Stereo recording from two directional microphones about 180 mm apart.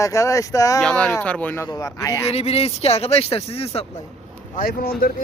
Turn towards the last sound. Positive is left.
turn(degrees=55)  # may be behind; listen again after turning